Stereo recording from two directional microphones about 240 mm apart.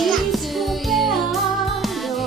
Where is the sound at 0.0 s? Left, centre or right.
Centre.